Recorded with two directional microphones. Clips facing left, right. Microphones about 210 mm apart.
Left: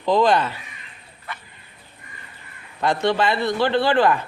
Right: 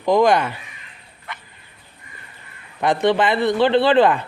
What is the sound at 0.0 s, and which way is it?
Speech, 15° right (ahead or behind).